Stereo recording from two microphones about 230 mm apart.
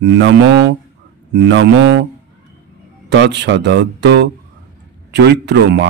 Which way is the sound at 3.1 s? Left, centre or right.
Right.